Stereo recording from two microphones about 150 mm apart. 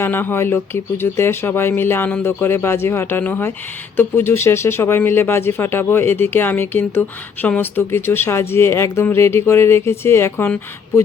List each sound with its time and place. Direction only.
0.0 s speech: 15° left (ahead or behind)